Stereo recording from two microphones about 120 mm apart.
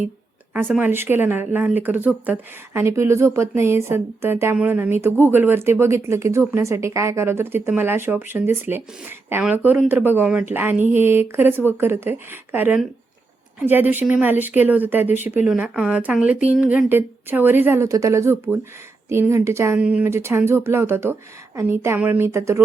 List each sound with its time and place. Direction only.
0.8 s speech: 15° right (ahead or behind)
19.8 s speech: 10° right (ahead or behind)
20.1 s speech: 20° right (ahead or behind)